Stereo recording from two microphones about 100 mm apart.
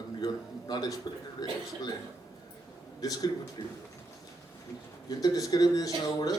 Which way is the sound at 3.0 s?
40° left (ahead or behind).